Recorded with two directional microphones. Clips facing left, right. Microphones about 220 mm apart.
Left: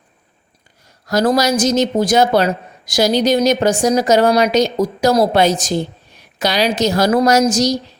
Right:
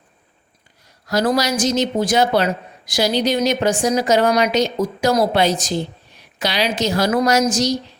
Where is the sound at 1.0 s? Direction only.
40° left (ahead or behind).